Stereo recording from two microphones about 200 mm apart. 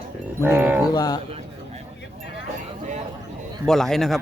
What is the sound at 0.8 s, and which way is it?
Speech, 20° left (ahead or behind).